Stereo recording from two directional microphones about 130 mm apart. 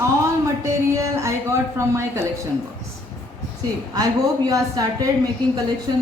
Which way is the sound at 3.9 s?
30° right (ahead or behind).